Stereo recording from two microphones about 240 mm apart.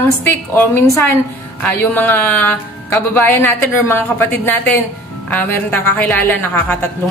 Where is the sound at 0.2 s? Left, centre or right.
Centre.